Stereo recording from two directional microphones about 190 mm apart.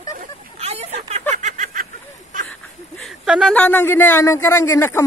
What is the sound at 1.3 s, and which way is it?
Snicker, 40° right (ahead or behind).